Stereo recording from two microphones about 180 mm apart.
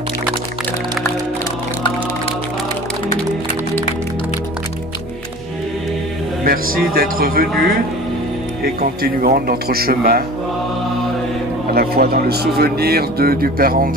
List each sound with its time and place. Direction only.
6.4 s speech: 55° right (ahead or behind)
8.8 s a man's voice: 50° right (ahead or behind)
11.7 s a man's voice: 60° right (ahead or behind)